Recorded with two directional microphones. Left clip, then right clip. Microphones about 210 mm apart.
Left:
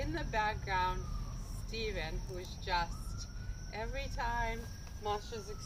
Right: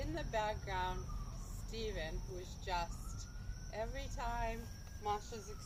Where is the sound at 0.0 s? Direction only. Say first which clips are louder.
Left 4 dB; 5° left (ahead or behind).